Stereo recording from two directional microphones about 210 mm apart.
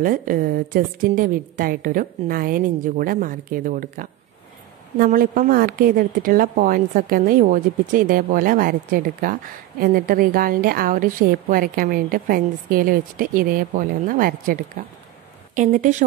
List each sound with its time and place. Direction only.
0.0 s a woman's voice: 40° right (ahead or behind)